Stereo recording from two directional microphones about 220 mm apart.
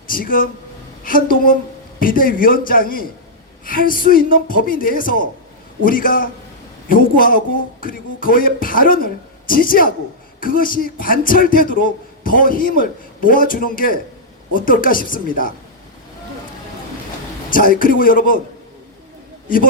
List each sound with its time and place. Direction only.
0.1 s speech: 40° left (ahead or behind)
17.5 s speech: 40° left (ahead or behind)